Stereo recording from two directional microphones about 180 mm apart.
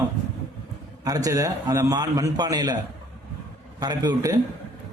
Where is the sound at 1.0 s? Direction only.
20° right (ahead or behind).